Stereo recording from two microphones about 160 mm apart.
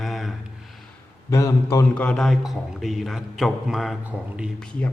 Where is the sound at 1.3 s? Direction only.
20° left (ahead or behind).